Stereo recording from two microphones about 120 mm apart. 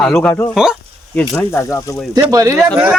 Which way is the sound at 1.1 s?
10° left (ahead or behind).